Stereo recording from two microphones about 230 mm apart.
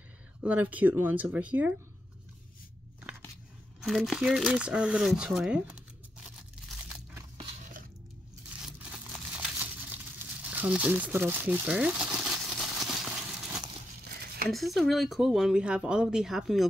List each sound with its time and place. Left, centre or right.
0.4 s speech: centre
3.8 s speech: centre
9.3 s crumpling: centre
10.4 s speech: centre
12.7 s a sound: centre
14.0 s a sound: right
14.5 s speech: centre